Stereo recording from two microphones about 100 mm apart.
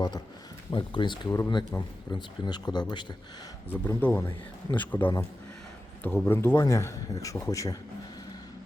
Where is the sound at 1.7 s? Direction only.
35° left (ahead or behind).